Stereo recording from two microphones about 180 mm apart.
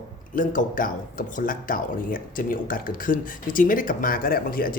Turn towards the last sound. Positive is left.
turn(degrees=50)  # may be behind; listen again after turning